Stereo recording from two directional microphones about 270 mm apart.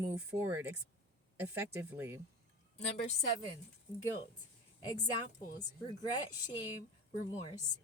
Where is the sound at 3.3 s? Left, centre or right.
Centre.